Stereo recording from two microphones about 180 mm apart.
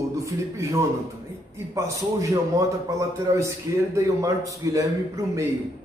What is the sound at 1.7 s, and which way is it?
A man's voice, 15° right (ahead or behind).